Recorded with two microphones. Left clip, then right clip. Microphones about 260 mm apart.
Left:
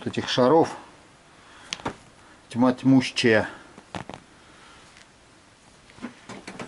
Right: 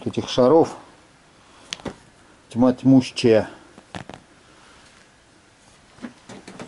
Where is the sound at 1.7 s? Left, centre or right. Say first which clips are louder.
Even; centre.